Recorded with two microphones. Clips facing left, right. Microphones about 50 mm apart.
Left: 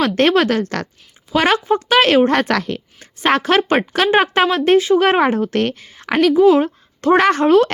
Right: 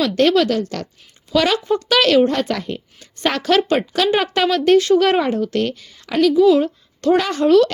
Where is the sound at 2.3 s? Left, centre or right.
Left.